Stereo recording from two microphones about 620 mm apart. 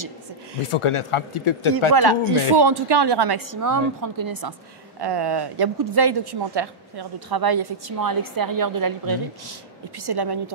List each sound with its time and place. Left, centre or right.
0.7 s speech: left
2.0 s a woman's voice: right